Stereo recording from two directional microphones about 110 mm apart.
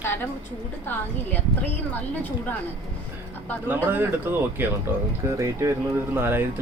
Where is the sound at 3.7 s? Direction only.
20° right (ahead or behind).